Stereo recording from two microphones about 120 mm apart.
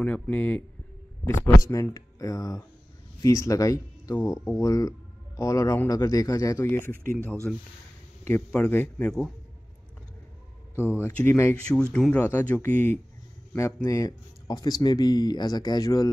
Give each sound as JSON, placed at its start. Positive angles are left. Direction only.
{"t": 0.0, "sound": "speech", "side_deg": 10}
{"t": 7.5, "sound": "speech", "side_deg": 5}
{"t": 11.0, "sound": "speech", "side_deg": 20}
{"t": 11.7, "sound": "speech", "side_deg": 5}